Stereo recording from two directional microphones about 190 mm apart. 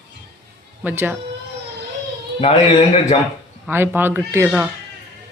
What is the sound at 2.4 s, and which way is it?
Speech, 30° left (ahead or behind).